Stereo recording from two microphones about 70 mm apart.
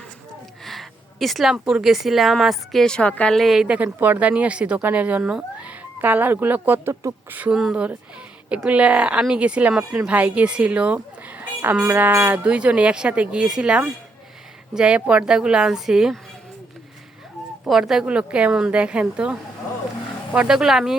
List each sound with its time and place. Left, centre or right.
0.6 s a sound: centre
1.6 s speech: centre
2.8 s a woman's voice: centre
3.3 s speech: centre
4.0 s speech: right; by 16.1 s centre
17.7 s speech: centre